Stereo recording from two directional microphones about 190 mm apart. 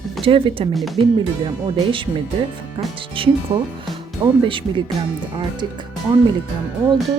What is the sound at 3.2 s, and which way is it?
Speech, 30° right (ahead or behind).